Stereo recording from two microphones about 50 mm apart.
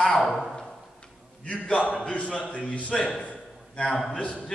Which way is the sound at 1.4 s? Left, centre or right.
Left.